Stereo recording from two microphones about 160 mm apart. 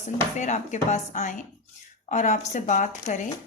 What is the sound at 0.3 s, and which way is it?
Speech, 50° left (ahead or behind).